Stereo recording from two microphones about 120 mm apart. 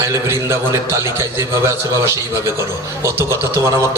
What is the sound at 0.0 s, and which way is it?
A man's voice, 20° right (ahead or behind).